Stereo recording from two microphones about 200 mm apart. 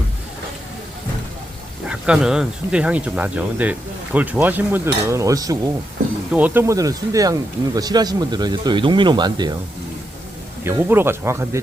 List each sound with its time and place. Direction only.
1.9 s speech: 5° right (ahead or behind); by 9.6 s 20° right (ahead or behind)
10.7 s speech: 10° right (ahead or behind)